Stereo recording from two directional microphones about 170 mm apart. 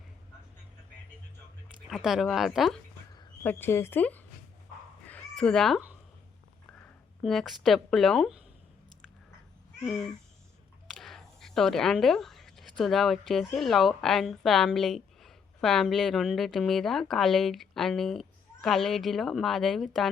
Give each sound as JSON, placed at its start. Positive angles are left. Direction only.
{"t": 1.9, "sound": "a woman's voice", "side_deg": 0}
{"t": 3.4, "sound": "speech", "side_deg": 10}
{"t": 5.4, "sound": "a woman's voice", "side_deg": 5}
{"t": 7.2, "sound": "a woman's voice", "side_deg": 0}
{"t": 9.8, "sound": "a woman's voice", "side_deg": 0}
{"t": 10.8, "sound": "a sound", "side_deg": 0}
{"t": 12.8, "sound": "a woman's voice", "side_deg": 0}